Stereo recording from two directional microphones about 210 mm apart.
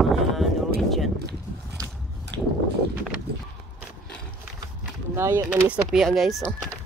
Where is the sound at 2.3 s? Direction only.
60° right (ahead or behind).